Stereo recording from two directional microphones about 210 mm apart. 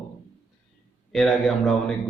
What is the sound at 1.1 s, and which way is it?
Speech, centre (ahead or behind).